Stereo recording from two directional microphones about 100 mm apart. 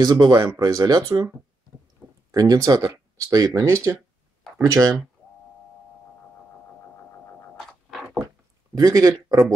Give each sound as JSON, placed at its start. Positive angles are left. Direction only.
{"t": 0.0, "sound": "speech", "side_deg": -45}
{"t": 2.3, "sound": "speech", "side_deg": -40}
{"t": 8.7, "sound": "speech", "side_deg": -35}